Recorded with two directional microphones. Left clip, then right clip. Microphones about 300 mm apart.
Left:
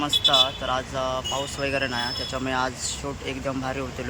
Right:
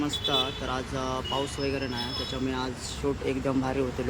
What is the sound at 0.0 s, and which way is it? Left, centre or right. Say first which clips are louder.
Speech: left 8 dB; centre.